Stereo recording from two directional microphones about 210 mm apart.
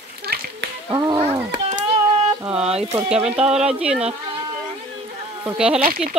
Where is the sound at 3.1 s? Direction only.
30° right (ahead or behind).